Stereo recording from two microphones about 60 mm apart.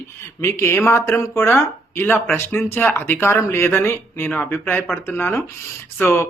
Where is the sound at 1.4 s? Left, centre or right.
Left.